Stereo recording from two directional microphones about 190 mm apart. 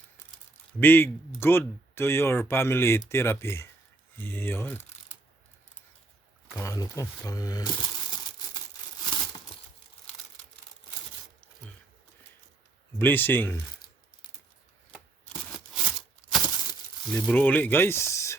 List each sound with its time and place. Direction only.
0.8 s speech: 10° left (ahead or behind)
6.6 s speech: 15° left (ahead or behind)
13.0 s speech: 10° left (ahead or behind)
15.7 s a sound: centre (ahead or behind)
17.1 s speech: 10° left (ahead or behind)